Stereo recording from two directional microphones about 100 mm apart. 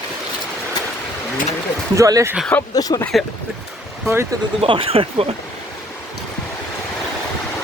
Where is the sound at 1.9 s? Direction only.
35° right (ahead or behind).